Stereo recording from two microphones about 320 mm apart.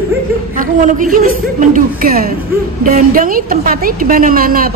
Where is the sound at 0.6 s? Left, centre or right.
Right.